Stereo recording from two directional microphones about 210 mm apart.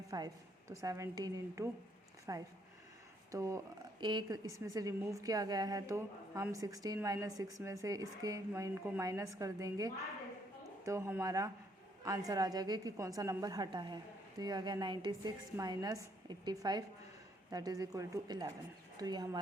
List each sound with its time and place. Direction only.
0.1 s a woman's voice: 20° right (ahead or behind)